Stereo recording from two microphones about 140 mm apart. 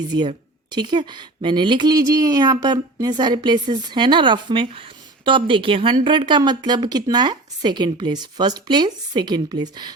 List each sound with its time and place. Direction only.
0.7 s speech: 30° right (ahead or behind)